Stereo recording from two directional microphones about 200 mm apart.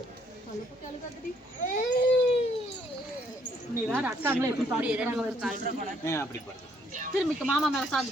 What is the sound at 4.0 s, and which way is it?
Speech, 10° right (ahead or behind).